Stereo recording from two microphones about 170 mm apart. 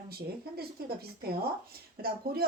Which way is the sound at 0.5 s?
65° right (ahead or behind).